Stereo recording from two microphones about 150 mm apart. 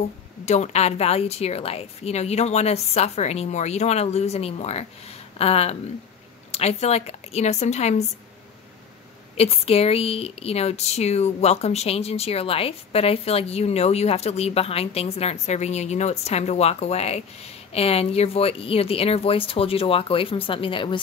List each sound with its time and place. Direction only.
0.5 s speech: 45° left (ahead or behind)
9.4 s speech: 40° left (ahead or behind)